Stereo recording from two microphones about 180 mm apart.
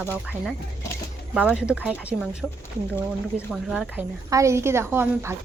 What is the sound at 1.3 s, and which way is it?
Speech, 5° right (ahead or behind).